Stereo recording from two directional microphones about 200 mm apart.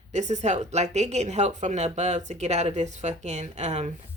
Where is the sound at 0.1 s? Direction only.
35° right (ahead or behind).